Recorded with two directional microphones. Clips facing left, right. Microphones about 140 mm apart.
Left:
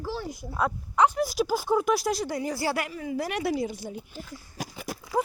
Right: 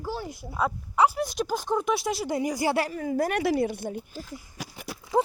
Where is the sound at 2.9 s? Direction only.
45° right (ahead or behind).